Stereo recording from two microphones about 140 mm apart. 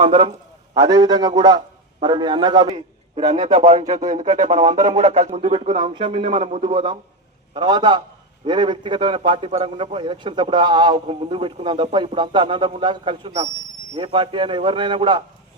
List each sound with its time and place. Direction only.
0.0 s a sound: 40° right (ahead or behind)
0.8 s a man's voice: 25° right (ahead or behind)
3.4 s speech: 60° right (ahead or behind)
5.3 s a man's voice: 40° right (ahead or behind)